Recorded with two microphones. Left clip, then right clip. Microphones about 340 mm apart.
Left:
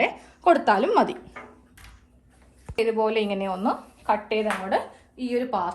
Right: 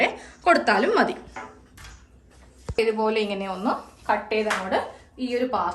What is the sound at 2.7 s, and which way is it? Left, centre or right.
A woman's voice, centre.